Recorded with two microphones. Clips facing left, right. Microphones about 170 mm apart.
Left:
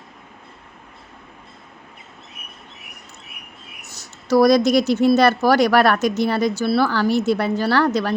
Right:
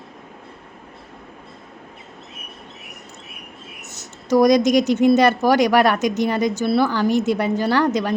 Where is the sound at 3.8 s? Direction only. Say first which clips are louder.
Right 3 dB; 20° right (ahead or behind).